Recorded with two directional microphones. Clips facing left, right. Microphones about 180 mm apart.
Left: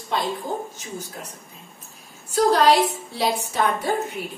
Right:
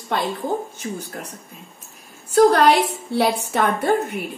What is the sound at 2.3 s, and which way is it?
A woman's voice, 60° right (ahead or behind).